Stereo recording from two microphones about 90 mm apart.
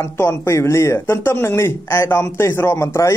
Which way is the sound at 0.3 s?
30° left (ahead or behind).